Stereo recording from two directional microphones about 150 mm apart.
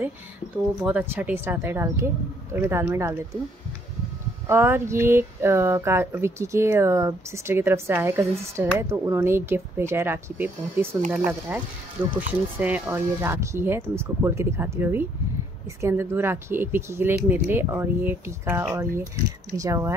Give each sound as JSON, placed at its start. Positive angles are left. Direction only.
{"t": 0.8, "sound": "speech", "side_deg": -15}
{"t": 4.5, "sound": "speech", "side_deg": -15}